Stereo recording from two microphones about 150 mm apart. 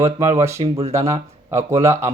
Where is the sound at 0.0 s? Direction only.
20° right (ahead or behind).